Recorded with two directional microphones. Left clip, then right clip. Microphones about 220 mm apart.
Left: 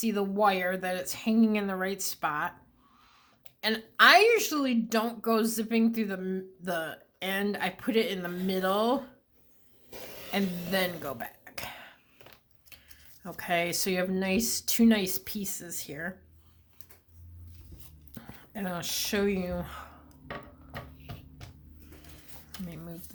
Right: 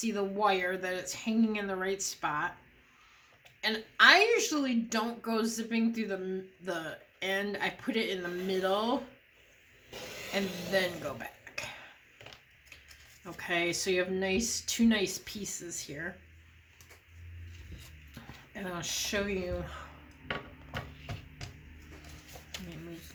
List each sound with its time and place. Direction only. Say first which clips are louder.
0.0 s a woman's voice: left 4 dB; 45° left (ahead or behind)
3.6 s a woman's voice: left 2 dB; 45° left (ahead or behind)
9.9 s a sound: right 2 dB; centre (ahead or behind)
10.7 s a sound: even; 45° left (ahead or behind)
13.3 s a woman's voice: left 2 dB; 45° left (ahead or behind)
18.1 s speech: left 3 dB; 45° left (ahead or behind)